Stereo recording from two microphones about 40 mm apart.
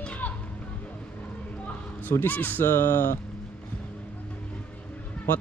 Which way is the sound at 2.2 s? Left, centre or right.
Left.